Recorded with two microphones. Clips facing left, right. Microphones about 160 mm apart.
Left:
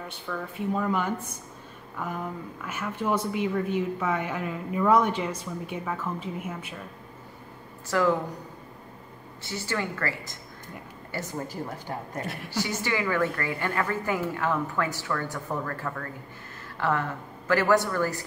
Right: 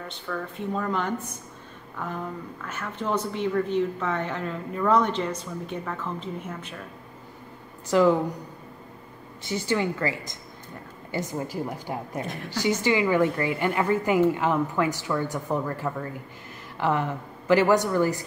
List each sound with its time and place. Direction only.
0.1 s speech: 10° left (ahead or behind)
7.9 s a woman's voice: 20° right (ahead or behind)
9.4 s a woman's voice: 15° right (ahead or behind)